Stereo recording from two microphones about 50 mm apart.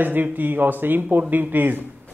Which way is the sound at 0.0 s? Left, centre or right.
Right.